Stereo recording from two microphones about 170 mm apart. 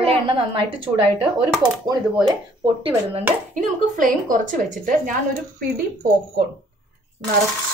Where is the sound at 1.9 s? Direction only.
25° right (ahead or behind).